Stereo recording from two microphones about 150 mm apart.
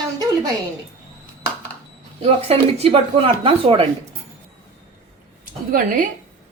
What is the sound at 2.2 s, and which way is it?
Speech, 45° right (ahead or behind).